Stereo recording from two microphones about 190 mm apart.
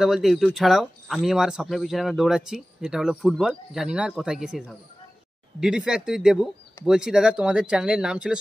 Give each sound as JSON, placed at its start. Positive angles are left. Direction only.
{"t": 0.0, "sound": "speech", "side_deg": 0}